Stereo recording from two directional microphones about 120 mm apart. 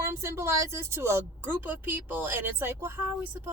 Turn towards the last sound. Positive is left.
turn(degrees=-20)  # may be behind; listen again after turning